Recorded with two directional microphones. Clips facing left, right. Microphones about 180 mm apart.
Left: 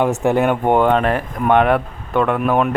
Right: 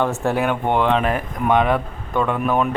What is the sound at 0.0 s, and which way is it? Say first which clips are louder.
Speech: left 4 dB; 15° left (ahead or behind).